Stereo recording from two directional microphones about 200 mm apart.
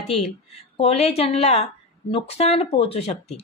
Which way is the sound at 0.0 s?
30° left (ahead or behind).